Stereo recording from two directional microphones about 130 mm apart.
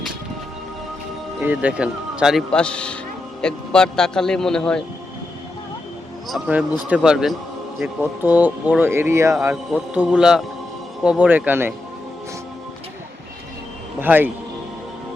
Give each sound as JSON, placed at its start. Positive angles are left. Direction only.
{"t": 1.4, "sound": "speech", "side_deg": -15}
{"t": 2.5, "sound": "a man's voice", "side_deg": 5}
{"t": 6.5, "sound": "speech", "side_deg": -10}
{"t": 14.0, "sound": "speech", "side_deg": -15}